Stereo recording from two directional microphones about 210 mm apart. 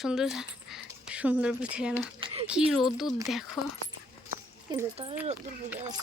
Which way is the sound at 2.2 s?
25° right (ahead or behind).